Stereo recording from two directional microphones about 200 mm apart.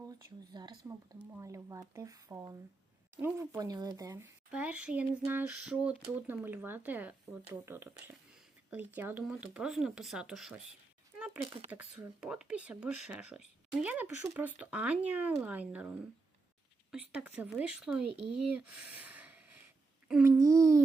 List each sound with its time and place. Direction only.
0.1 s speech: 20° right (ahead or behind)
4.5 s speech: 5° right (ahead or behind)
11.7 s speech: 5° right (ahead or behind)
20.4 s speech: 15° right (ahead or behind)